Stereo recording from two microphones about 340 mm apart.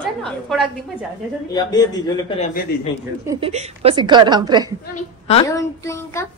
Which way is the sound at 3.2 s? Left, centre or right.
Centre.